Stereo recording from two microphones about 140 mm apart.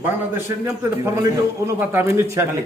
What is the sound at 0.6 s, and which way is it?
A man's voice, 20° right (ahead or behind).